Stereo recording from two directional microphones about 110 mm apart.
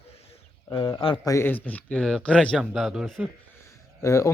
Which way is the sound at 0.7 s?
35° left (ahead or behind).